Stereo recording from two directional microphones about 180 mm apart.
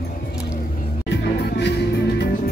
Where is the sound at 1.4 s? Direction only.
70° left (ahead or behind).